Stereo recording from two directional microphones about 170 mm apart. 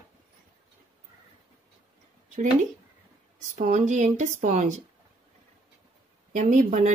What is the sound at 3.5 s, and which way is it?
Speech, 45° right (ahead or behind).